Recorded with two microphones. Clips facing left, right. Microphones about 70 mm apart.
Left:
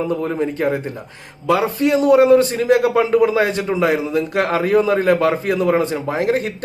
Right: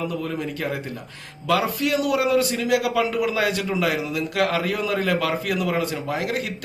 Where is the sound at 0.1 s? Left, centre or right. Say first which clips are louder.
Left 7 dB; left.